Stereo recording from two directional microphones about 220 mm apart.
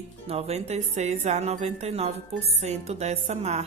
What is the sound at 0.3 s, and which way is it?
A woman's voice, 30° right (ahead or behind).